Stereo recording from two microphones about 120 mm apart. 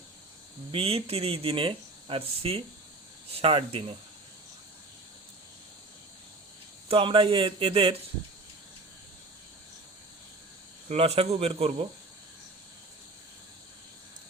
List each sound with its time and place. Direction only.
0.7 s speech: 50° right (ahead or behind)
6.8 s speech: 45° right (ahead or behind)
10.8 s speech: 60° right (ahead or behind)